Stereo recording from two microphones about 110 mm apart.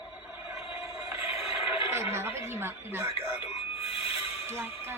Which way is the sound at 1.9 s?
25° right (ahead or behind).